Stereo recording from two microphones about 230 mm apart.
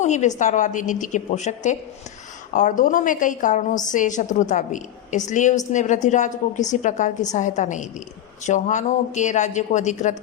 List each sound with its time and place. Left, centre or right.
0.0 s a woman's voice: left